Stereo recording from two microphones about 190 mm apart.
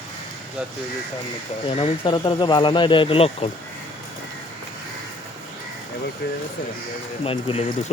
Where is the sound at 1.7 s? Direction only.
30° left (ahead or behind).